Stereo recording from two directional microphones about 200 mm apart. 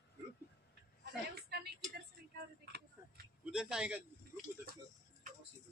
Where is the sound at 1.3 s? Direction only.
55° right (ahead or behind).